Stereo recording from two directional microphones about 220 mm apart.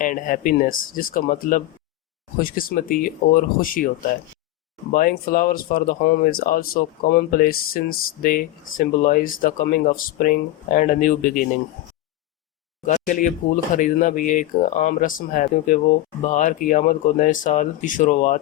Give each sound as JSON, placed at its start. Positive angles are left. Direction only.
{"t": 0.0, "sound": "speech", "side_deg": 35}
{"t": 4.9, "sound": "speech", "side_deg": 40}
{"t": 12.8, "sound": "speech", "side_deg": 35}